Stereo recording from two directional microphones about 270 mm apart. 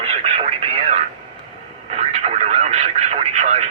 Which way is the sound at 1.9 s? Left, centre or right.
Right.